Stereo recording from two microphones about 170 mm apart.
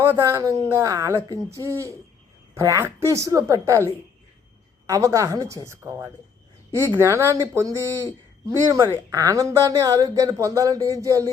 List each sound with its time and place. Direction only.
0.0 s a woman's voice: 15° right (ahead or behind)
8.4 s a woman's voice: 15° right (ahead or behind)